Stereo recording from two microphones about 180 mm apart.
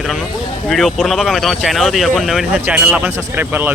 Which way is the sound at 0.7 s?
Centre (ahead or behind).